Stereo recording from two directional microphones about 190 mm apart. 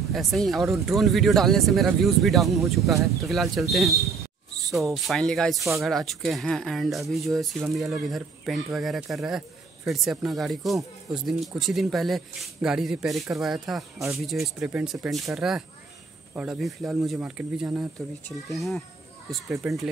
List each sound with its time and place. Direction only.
0.1 s speech: centre (ahead or behind)